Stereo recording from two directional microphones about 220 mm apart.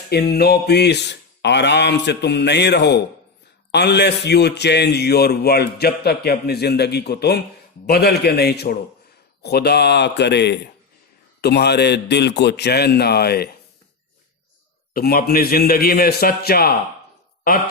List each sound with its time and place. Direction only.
0.1 s a man's voice: 45° left (ahead or behind)
14.9 s a man's voice: 45° left (ahead or behind)